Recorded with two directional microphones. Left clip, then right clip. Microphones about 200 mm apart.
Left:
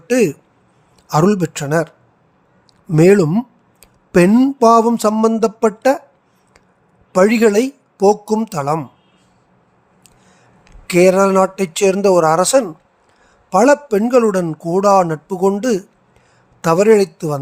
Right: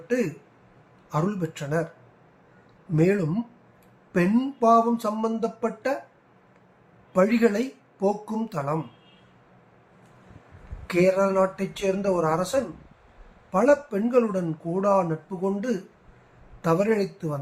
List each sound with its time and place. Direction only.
1.0 s speech: 55° left (ahead or behind)
2.9 s a man's voice: 60° left (ahead or behind)
7.1 s a man's voice: 55° left (ahead or behind)
10.8 s a man's voice: 55° left (ahead or behind)